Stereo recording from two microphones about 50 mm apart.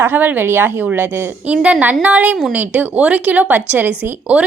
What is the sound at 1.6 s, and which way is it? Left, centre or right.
A woman's voice, right.